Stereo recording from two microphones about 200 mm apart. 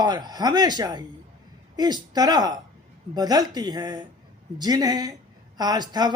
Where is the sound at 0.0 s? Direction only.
20° right (ahead or behind).